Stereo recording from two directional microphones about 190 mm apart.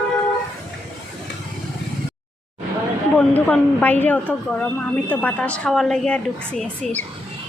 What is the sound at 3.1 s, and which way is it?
A woman's voice, 5° left (ahead or behind).